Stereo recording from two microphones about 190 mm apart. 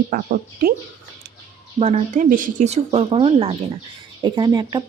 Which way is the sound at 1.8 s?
35° right (ahead or behind).